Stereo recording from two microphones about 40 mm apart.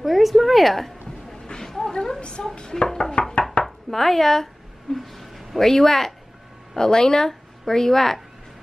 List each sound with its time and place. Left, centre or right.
0.0 s a woman's voice: centre
3.6 s chopping: centre
4.9 s a sound: centre
5.6 s speech: centre